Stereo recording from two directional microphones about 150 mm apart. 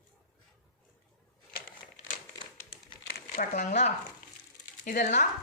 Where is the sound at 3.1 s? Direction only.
90° left.